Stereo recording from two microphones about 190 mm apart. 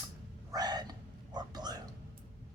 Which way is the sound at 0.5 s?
20° right (ahead or behind).